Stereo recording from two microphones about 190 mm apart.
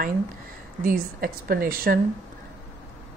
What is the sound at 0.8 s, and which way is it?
A woman's voice, 50° right (ahead or behind).